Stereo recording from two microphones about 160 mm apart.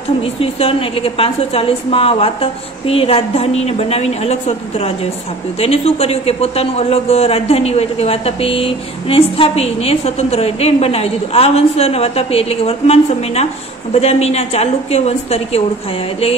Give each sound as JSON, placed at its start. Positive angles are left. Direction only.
{"t": 0.2, "sound": "a man's voice", "side_deg": 35}